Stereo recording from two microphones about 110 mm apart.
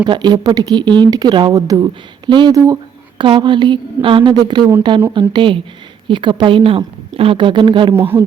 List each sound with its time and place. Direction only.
0.0 s speech: 40° right (ahead or behind)
1.5 s speech: 35° right (ahead or behind)
2.5 s speech: 35° right (ahead or behind)
3.2 s speech: 45° right (ahead or behind)
7.9 s speech: 20° right (ahead or behind)